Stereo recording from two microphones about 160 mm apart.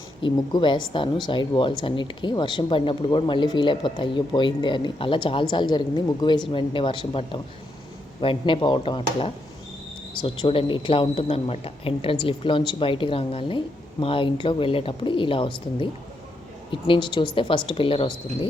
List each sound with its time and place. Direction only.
0.2 s speech: 30° left (ahead or behind)